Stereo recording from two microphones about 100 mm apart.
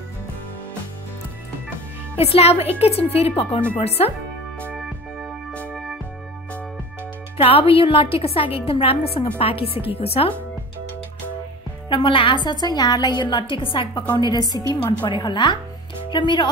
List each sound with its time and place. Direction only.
2.1 s a woman's voice: 90° left
5.5 s music: 15° left (ahead or behind)
7.3 s a woman's voice: 70° left (ahead or behind)
11.9 s a woman's voice: 55° left (ahead or behind)
12.4 s a woman's voice: 45° left (ahead or behind)